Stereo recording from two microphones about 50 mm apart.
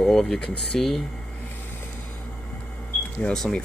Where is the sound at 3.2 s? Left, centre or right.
Left.